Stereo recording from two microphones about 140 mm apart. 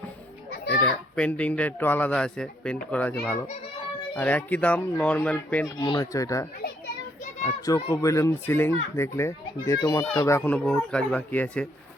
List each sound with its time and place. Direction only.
0.8 s speech: 10° left (ahead or behind)
5.8 s speech: 30° left (ahead or behind); by 11.7 s 10° left (ahead or behind)